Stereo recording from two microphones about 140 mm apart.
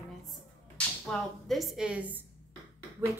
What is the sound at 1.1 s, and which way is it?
A woman's voice, centre (ahead or behind).